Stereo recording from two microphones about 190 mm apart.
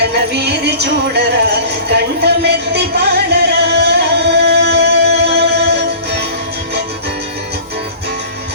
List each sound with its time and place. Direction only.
0.0 s music: 60° right (ahead or behind)